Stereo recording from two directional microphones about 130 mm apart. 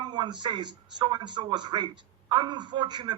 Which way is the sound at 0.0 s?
35° right (ahead or behind).